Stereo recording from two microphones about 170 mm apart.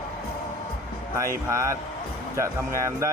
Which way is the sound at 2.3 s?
15° right (ahead or behind).